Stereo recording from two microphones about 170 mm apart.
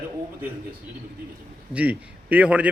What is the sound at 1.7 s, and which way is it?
A man's voice, 10° right (ahead or behind).